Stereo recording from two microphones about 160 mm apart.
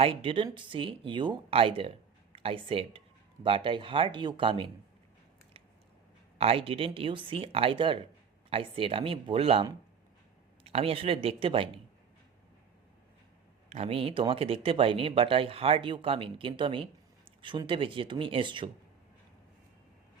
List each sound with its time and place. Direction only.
0.0 s speech: 35° right (ahead or behind)
6.4 s speech: 35° right (ahead or behind)
13.7 s speech: 40° right (ahead or behind)